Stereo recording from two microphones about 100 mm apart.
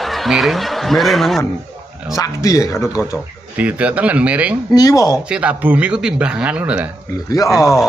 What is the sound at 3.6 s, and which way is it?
Speech, 15° right (ahead or behind).